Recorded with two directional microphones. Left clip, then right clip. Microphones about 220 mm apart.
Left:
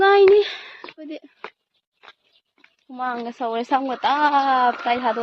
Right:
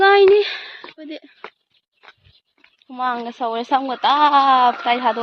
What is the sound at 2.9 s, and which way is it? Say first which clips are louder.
A woman's voice: right 4 dB; 5° right (ahead or behind).